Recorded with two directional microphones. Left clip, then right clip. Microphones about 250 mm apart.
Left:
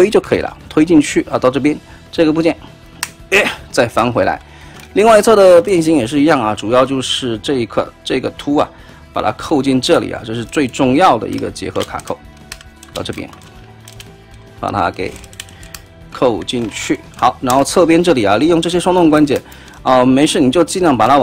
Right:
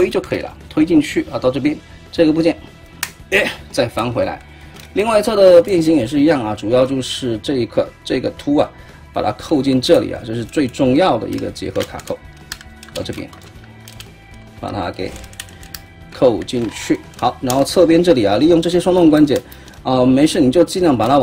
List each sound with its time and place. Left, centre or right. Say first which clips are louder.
0.0 s speech: left 6 dB; centre
14.6 s speech: left 7 dB; centre